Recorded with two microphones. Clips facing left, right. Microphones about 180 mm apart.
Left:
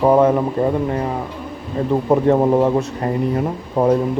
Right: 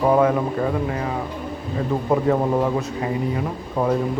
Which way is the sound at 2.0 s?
25° left (ahead or behind).